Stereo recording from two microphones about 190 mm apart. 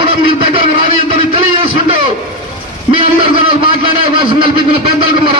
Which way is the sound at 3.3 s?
25° right (ahead or behind).